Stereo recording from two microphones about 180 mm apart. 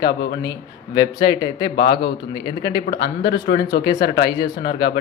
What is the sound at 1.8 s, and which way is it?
Speech, 65° left (ahead or behind).